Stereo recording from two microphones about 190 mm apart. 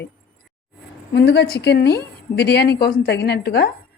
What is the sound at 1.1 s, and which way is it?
A woman's voice, 60° left (ahead or behind).